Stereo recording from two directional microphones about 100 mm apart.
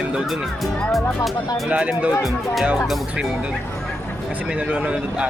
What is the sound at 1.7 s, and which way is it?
Speech, 10° right (ahead or behind).